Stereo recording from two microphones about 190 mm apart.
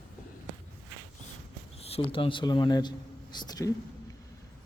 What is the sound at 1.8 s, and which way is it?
Speech, 30° left (ahead or behind).